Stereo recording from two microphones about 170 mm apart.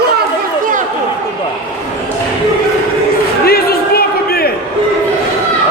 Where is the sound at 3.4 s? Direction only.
65° left (ahead or behind).